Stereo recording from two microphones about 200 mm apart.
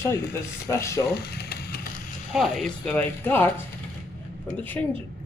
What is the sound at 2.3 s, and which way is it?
Speech, 5° left (ahead or behind).